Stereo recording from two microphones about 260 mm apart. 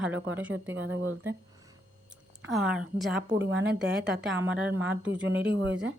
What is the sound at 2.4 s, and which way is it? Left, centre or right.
A woman's voice, centre.